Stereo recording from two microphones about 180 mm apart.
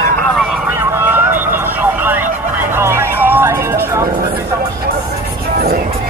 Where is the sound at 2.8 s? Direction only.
15° right (ahead or behind).